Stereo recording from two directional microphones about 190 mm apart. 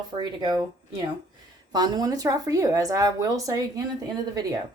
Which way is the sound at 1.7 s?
20° right (ahead or behind).